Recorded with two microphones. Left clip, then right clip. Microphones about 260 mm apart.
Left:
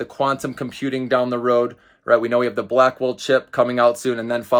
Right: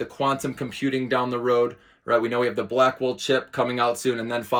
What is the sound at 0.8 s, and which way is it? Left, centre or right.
Speech, left.